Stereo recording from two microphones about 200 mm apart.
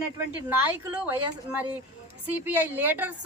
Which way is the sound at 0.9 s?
5° right (ahead or behind).